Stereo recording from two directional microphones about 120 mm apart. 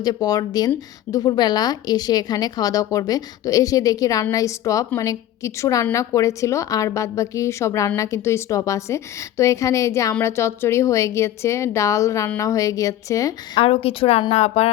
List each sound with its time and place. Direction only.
0.0 s a woman's voice: 35° left (ahead or behind)
13.6 s a woman's voice: 55° left (ahead or behind)